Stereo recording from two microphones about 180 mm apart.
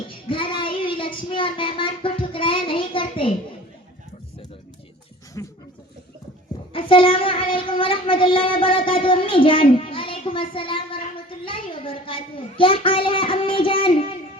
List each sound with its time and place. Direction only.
0.1 s child singing: 30° left (ahead or behind)
5.4 s a sound: 15° left (ahead or behind)
6.7 s child singing: 30° left (ahead or behind)